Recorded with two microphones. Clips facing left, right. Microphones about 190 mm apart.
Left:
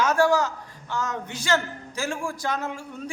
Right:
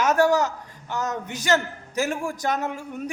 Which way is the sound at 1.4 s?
20° right (ahead or behind).